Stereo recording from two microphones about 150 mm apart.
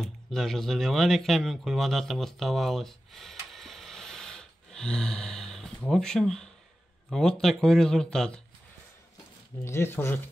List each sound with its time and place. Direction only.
0.0 s speech: 5° left (ahead or behind)
9.7 s speech: 15° left (ahead or behind)